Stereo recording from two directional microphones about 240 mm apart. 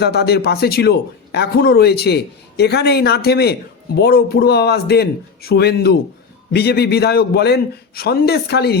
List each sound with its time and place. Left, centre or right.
0.0 s a man's voice: left